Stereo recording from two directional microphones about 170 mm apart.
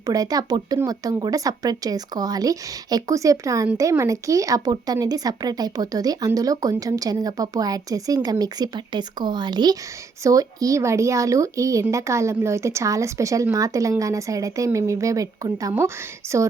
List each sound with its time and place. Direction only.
0.0 s speech: 20° right (ahead or behind)